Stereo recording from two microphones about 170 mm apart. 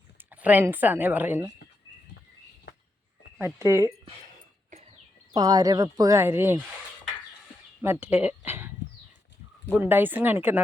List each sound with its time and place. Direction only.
0.2 s speech: 10° right (ahead or behind)
3.3 s speech: 10° right (ahead or behind)
5.3 s speech: 25° right (ahead or behind)
7.8 s speech: 10° right (ahead or behind)
9.7 s speech: 10° right (ahead or behind)